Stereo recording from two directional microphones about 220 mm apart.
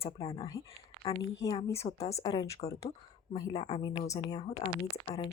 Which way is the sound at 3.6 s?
30° left (ahead or behind).